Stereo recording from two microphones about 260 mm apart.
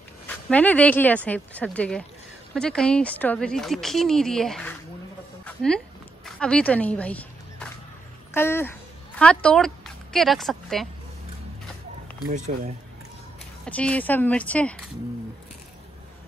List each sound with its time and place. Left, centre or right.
0.5 s speech: centre
5.4 s a sound: centre
6.2 s speech: centre
12.3 s speech: right
13.7 s speech: centre